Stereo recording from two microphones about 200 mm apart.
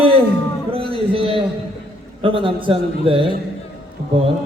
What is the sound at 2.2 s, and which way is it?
A man's voice, 25° right (ahead or behind).